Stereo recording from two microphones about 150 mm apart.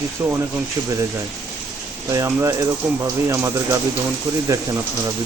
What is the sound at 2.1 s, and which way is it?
Speech, 20° right (ahead or behind).